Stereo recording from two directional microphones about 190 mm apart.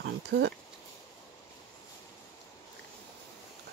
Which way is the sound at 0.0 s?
65° right (ahead or behind).